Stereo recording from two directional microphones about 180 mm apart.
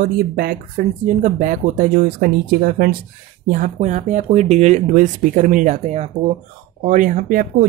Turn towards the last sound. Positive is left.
turn(degrees=-45)  # may be behind; listen again after turning